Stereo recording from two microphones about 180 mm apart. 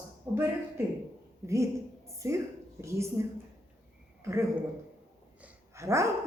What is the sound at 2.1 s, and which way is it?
A woman's voice, 15° right (ahead or behind).